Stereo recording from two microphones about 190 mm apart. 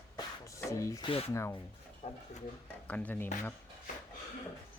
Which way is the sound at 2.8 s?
10° left (ahead or behind).